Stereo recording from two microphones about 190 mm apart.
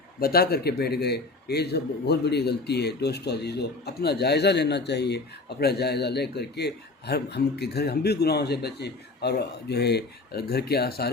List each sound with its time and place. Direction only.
0.2 s a man's voice: 55° left (ahead or behind)